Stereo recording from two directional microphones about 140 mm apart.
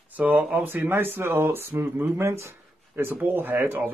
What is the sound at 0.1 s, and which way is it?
A man's voice, 10° right (ahead or behind).